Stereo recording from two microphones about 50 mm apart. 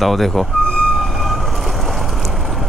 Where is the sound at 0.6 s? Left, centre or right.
Centre.